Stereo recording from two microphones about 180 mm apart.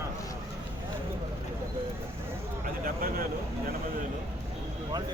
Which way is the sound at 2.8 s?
55° right (ahead or behind).